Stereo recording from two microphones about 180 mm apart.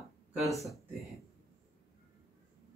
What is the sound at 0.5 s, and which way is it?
Speech, centre (ahead or behind).